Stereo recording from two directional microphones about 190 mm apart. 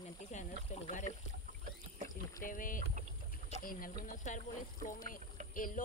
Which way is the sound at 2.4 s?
45° left (ahead or behind).